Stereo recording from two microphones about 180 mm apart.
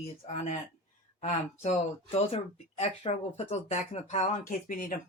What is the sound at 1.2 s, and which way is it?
Speech, 35° left (ahead or behind).